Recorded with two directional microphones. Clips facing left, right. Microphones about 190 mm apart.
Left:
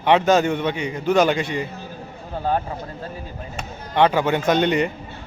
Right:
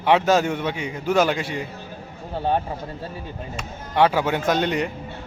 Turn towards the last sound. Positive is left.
turn(degrees=0)  # may be behind; listen again after turning